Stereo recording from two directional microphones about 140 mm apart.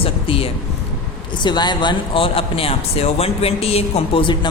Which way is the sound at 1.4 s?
30° left (ahead or behind).